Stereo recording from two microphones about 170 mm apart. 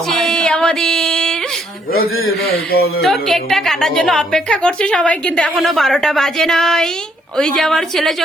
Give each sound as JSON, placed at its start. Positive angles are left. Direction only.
{"t": 0.1, "sound": "music", "side_deg": 5}
{"t": 1.9, "sound": "a man's voice", "side_deg": 60}
{"t": 3.0, "sound": "a woman's voice", "side_deg": 0}